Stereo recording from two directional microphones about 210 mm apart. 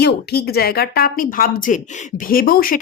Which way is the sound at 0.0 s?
50° left (ahead or behind).